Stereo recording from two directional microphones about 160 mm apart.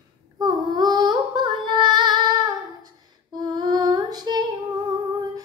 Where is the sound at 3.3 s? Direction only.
25° right (ahead or behind).